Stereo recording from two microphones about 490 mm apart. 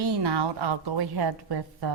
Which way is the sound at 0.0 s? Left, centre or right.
Right.